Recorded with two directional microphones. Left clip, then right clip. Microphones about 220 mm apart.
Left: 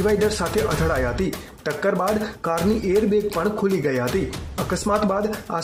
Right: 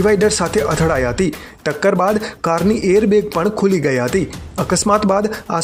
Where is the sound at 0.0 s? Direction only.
35° right (ahead or behind).